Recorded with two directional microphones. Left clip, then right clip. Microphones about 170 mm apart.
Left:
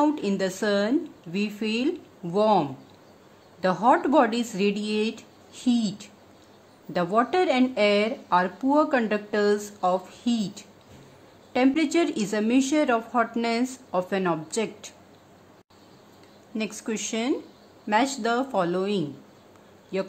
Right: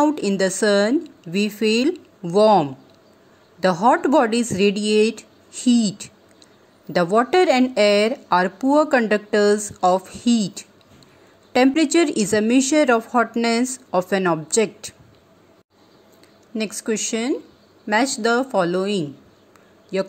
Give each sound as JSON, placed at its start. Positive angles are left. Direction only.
{"t": 0.0, "sound": "speech", "side_deg": -30}
{"t": 16.5, "sound": "speech", "side_deg": -25}